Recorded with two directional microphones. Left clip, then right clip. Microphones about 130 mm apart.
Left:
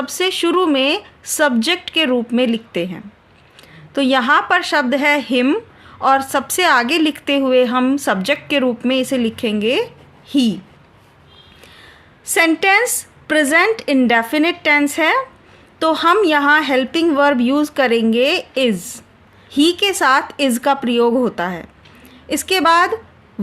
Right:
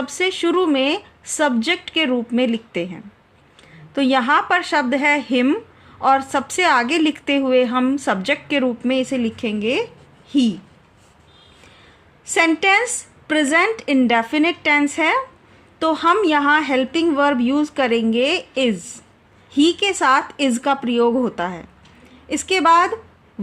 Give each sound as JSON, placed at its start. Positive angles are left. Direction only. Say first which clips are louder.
{"t": 0.0, "sound": "a woman's voice", "louder": "left 2 dB", "side_deg": 15}
{"t": 12.2, "sound": "a woman's voice", "louder": "left 2 dB", "side_deg": 30}